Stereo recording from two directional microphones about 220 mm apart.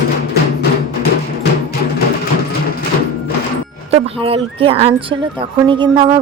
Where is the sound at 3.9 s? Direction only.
25° right (ahead or behind).